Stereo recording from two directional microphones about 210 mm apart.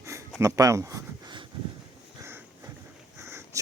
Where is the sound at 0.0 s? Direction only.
15° right (ahead or behind).